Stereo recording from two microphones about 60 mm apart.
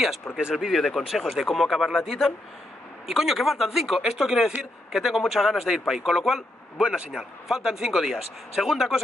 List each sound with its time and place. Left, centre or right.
0.4 s speech: centre
0.7 s speech: centre